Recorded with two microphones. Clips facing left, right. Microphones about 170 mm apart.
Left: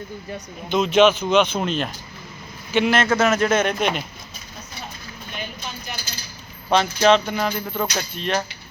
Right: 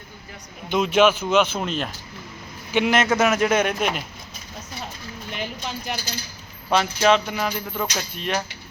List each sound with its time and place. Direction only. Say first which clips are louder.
0.7 s a man's voice: left 2 dB; 10° right (ahead or behind)
2.7 s a man's voice: left 1 dB; 15° right (ahead or behind)
5.3 s a sound: right 3 dB; 90° right
6.7 s a man's voice: left 2 dB; 5° right (ahead or behind)